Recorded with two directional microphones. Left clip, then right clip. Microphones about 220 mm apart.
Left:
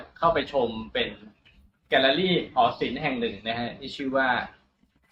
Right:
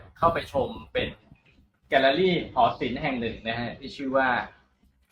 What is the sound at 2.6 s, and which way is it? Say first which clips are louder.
A man's voice: even; 20° right (ahead or behind).